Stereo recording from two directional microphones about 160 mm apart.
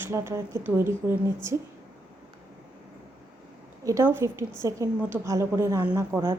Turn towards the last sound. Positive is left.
turn(degrees=-15)  # may be behind; listen again after turning